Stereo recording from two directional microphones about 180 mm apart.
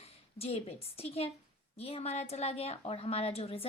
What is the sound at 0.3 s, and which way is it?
A woman's voice, 35° left (ahead or behind).